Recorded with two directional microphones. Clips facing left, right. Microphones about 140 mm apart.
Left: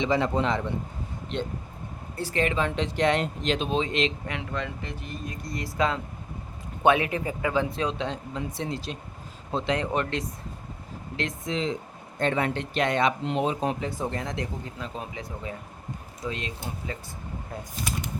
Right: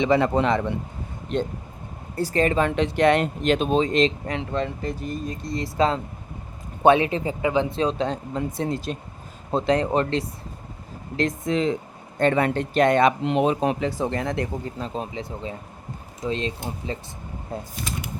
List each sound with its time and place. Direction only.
0.0 s speech: 65° right (ahead or behind)
1.3 s speech: 45° right (ahead or behind)
2.6 s speech: 60° right (ahead or behind); by 5.4 s 40° right (ahead or behind)
5.4 s speech: 25° right (ahead or behind)
11.2 s speech: 50° right (ahead or behind); by 14.4 s 65° right (ahead or behind)
14.8 s speech: 30° right (ahead or behind)